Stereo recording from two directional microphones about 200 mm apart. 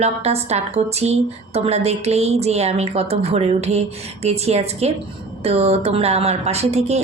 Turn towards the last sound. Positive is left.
turn(degrees=-35)  # may be behind; listen again after turning